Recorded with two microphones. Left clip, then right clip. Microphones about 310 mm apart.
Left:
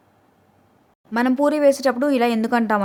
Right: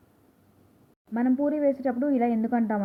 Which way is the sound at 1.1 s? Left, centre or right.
Left.